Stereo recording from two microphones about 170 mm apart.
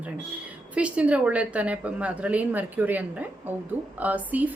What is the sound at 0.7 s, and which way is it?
A woman's voice, 5° right (ahead or behind).